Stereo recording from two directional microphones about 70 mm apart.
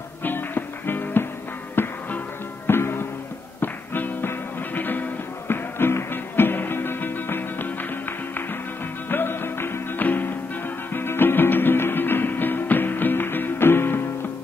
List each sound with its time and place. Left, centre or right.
0.2 s music: left
9.1 s music: left